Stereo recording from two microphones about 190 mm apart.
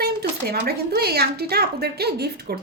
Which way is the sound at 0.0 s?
55° right (ahead or behind).